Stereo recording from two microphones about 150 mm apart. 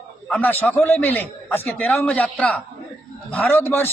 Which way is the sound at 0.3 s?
10° left (ahead or behind).